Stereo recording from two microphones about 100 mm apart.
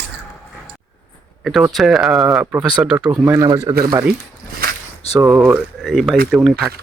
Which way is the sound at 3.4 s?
40° right (ahead or behind).